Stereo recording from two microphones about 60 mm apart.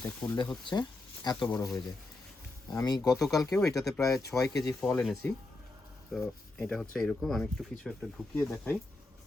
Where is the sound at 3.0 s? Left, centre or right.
Left.